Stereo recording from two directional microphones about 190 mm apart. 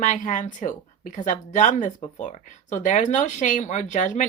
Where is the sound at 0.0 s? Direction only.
40° left (ahead or behind).